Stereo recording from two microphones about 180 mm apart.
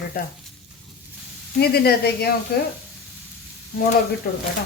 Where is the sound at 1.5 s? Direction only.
60° left (ahead or behind).